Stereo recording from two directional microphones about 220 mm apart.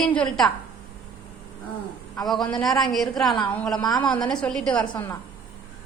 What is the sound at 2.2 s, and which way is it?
A woman's voice, centre (ahead or behind).